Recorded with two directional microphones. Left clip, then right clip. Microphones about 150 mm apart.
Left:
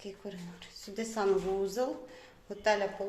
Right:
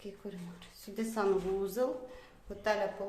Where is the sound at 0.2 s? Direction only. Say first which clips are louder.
Left 2 dB; 5° right (ahead or behind).